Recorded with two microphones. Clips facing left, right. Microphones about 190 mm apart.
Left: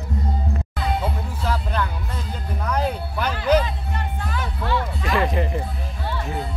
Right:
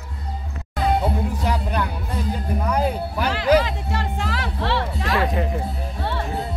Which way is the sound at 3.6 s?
85° right.